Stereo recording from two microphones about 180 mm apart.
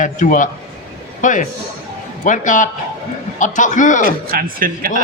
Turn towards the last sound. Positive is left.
turn(degrees=-50)  # may be behind; listen again after turning